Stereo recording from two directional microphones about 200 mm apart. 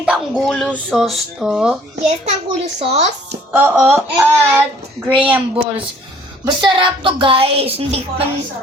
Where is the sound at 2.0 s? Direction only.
35° right (ahead or behind).